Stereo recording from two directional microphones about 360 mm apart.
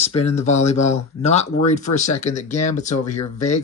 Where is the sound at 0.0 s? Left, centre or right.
Centre.